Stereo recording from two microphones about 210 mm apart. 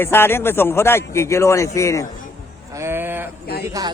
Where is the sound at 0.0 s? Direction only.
10° left (ahead or behind).